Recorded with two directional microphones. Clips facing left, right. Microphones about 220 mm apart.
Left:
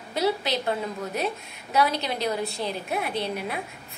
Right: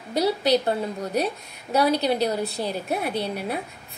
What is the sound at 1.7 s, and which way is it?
A woman's voice, 35° right (ahead or behind).